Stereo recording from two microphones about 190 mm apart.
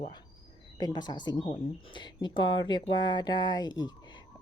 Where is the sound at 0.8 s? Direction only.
20° left (ahead or behind).